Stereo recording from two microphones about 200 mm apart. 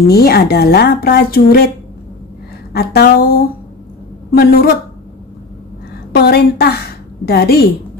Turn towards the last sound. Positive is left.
turn(degrees=50)  # may be behind; listen again after turning